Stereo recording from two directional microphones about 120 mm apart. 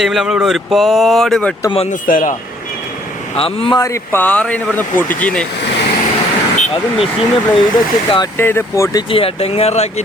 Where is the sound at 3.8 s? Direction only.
25° left (ahead or behind).